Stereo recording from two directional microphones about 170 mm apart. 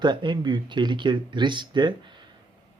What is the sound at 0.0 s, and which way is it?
Speech, 25° right (ahead or behind).